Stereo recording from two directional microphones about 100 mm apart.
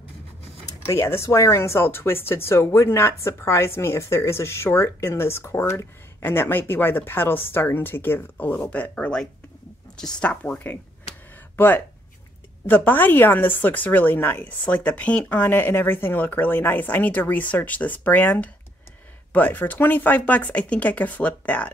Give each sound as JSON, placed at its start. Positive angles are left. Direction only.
{"t": 0.7, "sound": "a woman's voice", "side_deg": 25}